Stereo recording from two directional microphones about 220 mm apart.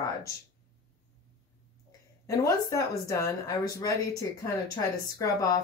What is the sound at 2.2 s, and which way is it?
Speech, 15° left (ahead or behind).